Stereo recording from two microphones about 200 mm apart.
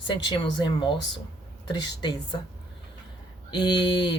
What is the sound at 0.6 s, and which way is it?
Speech, 25° left (ahead or behind).